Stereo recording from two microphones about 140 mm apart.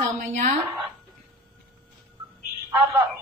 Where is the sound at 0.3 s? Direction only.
60° right (ahead or behind).